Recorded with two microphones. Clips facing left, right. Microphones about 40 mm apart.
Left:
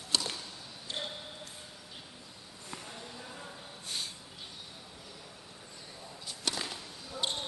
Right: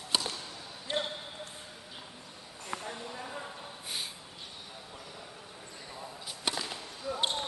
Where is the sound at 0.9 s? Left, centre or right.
Right.